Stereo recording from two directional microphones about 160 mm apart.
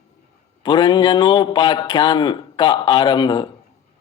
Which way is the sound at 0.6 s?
30° left (ahead or behind).